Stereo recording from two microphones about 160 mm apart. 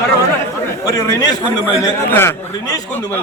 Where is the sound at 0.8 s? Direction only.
20° left (ahead or behind).